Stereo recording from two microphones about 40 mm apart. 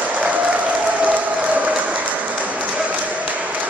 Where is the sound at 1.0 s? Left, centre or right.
Right.